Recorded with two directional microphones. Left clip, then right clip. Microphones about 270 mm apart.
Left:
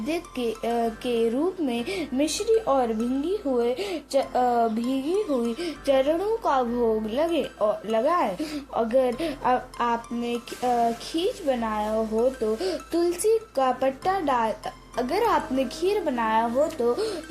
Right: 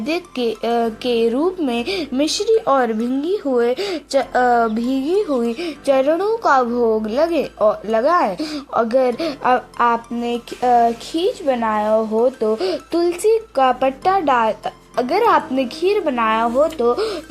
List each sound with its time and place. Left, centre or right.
0.0 s a woman's voice: centre